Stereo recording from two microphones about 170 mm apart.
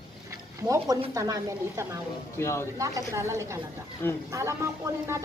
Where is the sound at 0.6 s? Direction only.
20° right (ahead or behind).